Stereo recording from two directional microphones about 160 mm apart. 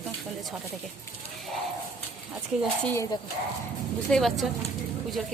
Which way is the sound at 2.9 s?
20° left (ahead or behind).